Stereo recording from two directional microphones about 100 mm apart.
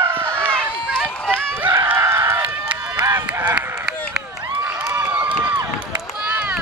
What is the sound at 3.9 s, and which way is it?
Run, 10° right (ahead or behind).